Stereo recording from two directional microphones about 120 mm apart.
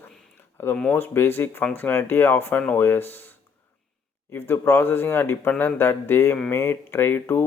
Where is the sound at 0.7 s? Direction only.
10° left (ahead or behind).